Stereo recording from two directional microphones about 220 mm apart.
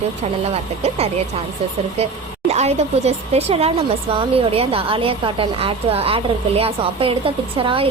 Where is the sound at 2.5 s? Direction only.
30° right (ahead or behind).